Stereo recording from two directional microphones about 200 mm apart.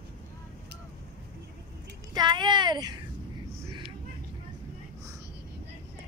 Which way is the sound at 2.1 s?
25° right (ahead or behind).